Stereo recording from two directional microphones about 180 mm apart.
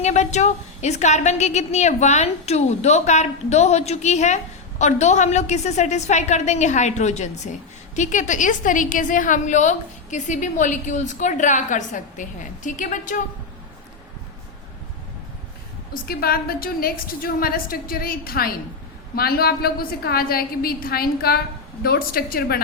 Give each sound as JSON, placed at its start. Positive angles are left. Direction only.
{"t": 0.0, "sound": "a woman's voice", "side_deg": 40}
{"t": 16.0, "sound": "a woman's voice", "side_deg": 55}